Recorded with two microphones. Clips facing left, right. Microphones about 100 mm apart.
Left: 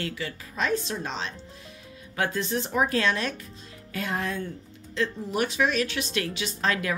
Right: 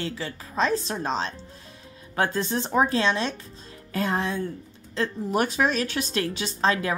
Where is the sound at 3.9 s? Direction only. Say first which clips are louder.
Right 4 dB; 35° right (ahead or behind).